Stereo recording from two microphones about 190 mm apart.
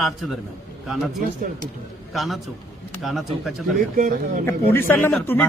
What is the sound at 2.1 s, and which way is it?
Speech, centre (ahead or behind).